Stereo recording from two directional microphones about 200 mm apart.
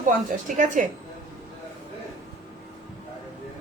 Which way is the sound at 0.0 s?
40° right (ahead or behind).